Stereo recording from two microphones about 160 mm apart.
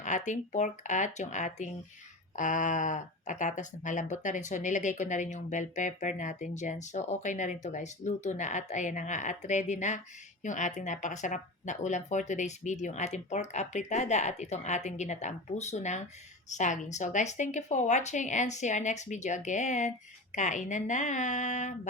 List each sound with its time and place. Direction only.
0.0 s speech: 50° left (ahead or behind)